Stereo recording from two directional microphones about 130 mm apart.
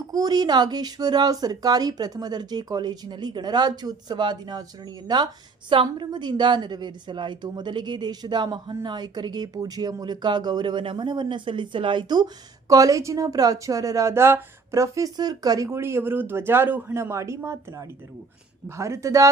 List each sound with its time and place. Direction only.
0.1 s speech: 30° right (ahead or behind)